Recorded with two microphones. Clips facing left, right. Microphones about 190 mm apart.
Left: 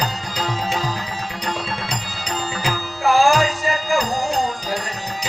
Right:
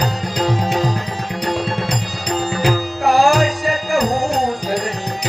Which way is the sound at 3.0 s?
60° right (ahead or behind).